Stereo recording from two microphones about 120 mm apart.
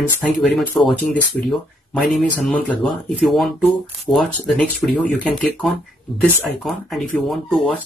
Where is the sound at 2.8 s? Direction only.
Centre (ahead or behind).